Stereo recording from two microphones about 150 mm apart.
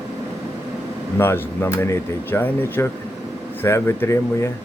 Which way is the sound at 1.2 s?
15° left (ahead or behind).